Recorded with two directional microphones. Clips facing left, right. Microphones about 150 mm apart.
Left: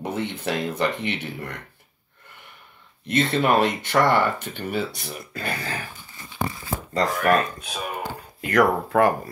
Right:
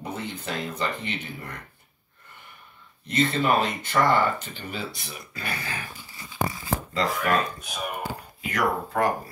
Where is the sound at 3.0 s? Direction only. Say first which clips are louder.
Left 2 dB; 65° left (ahead or behind); by 5.5 s 50° left (ahead or behind).